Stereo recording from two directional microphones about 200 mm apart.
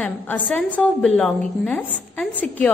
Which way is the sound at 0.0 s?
5° left (ahead or behind).